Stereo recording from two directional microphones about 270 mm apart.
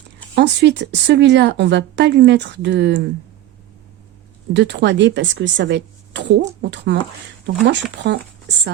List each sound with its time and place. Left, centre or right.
0.3 s a woman's voice: right
4.5 s a woman's voice: right